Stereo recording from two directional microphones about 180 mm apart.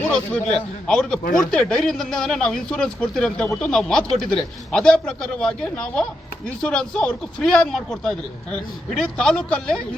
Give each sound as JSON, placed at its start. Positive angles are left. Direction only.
{"t": 0.1, "sound": "speech", "side_deg": 5}